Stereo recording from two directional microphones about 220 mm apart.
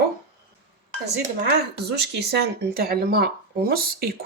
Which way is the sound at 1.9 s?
50° right (ahead or behind).